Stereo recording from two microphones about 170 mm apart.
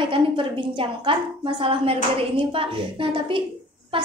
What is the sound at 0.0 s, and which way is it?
A woman's voice, 30° right (ahead or behind).